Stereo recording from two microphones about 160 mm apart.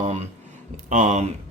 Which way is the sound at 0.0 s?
45° right (ahead or behind).